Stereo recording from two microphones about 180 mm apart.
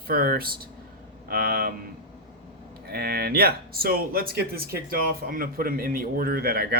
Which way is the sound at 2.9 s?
60° right (ahead or behind).